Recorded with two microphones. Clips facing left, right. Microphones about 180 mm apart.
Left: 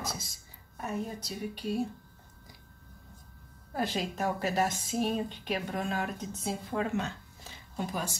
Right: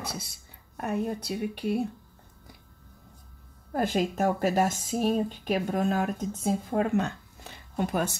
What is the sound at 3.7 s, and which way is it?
A woman's voice, 50° right (ahead or behind).